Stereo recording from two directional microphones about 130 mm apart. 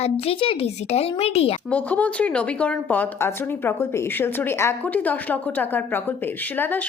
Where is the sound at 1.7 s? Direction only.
10° left (ahead or behind).